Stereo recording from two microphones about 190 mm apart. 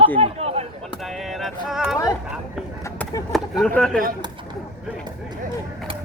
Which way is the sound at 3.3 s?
Centre (ahead or behind).